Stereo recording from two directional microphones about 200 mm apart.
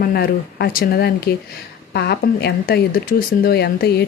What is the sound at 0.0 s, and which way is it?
Speech, 50° left (ahead or behind).